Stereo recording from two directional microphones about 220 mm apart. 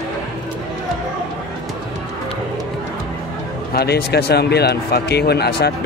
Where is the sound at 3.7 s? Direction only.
45° left (ahead or behind).